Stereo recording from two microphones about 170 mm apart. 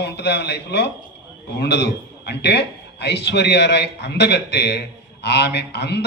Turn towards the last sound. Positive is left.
turn(degrees=80)